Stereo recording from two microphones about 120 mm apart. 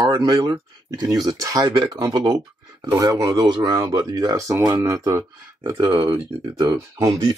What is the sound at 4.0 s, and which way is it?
Speech, 30° right (ahead or behind).